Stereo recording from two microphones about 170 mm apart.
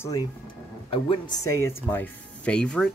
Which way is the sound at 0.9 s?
30° left (ahead or behind).